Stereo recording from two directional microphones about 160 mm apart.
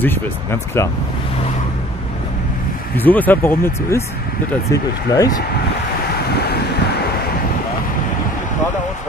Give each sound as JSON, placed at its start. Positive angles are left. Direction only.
{"t": 0.0, "sound": "speech", "side_deg": 15}
{"t": 3.0, "sound": "speech", "side_deg": 10}